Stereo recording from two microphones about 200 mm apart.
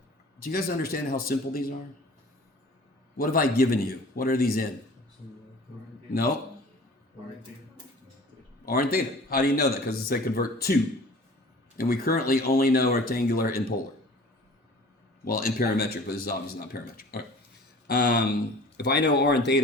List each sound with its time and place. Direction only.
0.4 s a man's voice: 45° left (ahead or behind)
3.2 s a man's voice: 45° left (ahead or behind)
8.6 s a man's voice: 50° left (ahead or behind)
11.8 s a man's voice: 45° left (ahead or behind)
15.2 s a man's voice: 45° left (ahead or behind)